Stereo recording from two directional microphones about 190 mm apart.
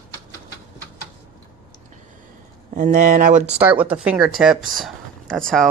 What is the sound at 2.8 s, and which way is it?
Speech, 45° right (ahead or behind).